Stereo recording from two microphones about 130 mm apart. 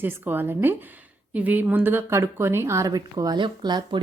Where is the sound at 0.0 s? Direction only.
15° right (ahead or behind).